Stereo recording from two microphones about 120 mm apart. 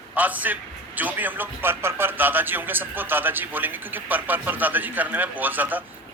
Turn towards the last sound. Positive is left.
turn(degrees=-15)  # may be behind; listen again after turning